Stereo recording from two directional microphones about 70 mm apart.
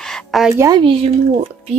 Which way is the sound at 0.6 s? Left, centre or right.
Right.